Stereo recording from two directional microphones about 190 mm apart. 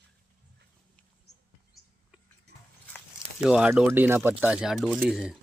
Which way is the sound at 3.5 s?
5° right (ahead or behind).